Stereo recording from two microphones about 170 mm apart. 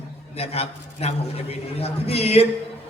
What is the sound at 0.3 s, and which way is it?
A man's voice, 35° left (ahead or behind).